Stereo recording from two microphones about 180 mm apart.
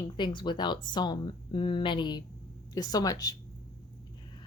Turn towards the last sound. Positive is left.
turn(degrees=20)  # may be behind; listen again after turning